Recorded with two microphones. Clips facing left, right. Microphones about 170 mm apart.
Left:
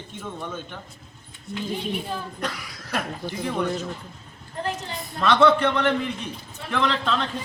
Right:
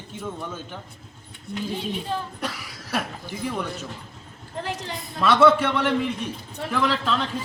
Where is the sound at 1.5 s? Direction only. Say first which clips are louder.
Right 1 dB; 60° right (ahead or behind).